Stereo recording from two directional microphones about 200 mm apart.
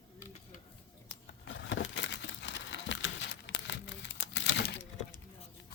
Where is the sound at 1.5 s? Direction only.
65° left (ahead or behind).